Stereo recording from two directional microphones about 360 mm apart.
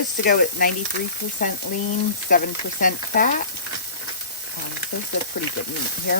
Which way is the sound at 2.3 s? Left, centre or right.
Left.